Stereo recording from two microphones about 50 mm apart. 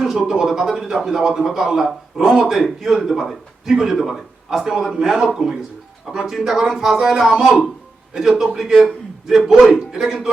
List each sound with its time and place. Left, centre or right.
0.0 s speech: centre
7.4 s a man's voice: centre